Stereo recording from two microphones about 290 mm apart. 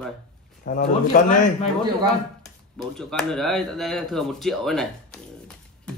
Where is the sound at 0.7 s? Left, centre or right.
Left.